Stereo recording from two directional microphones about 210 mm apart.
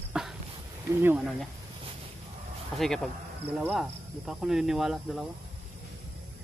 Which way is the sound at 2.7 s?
Centre (ahead or behind).